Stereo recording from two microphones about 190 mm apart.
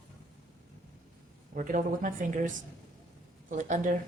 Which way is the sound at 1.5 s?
45° right (ahead or behind).